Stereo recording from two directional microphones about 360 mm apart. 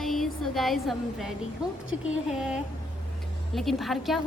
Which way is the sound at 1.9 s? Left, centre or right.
Left.